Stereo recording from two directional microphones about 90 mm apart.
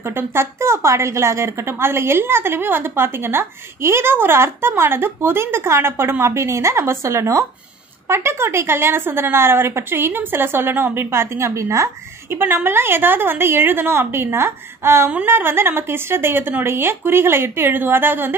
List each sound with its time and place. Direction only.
0.0 s a woman's voice: 25° right (ahead or behind)